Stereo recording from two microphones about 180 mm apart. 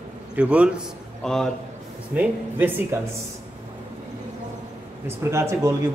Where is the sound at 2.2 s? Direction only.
10° right (ahead or behind).